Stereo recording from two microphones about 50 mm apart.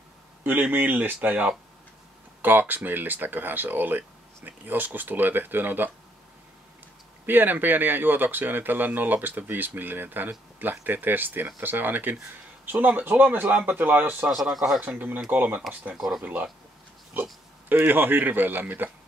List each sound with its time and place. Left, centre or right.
0.4 s speech: right
7.2 s speech: right
14.3 s speech: centre
14.8 s speech: right
17.1 s oink: right
17.7 s speech: right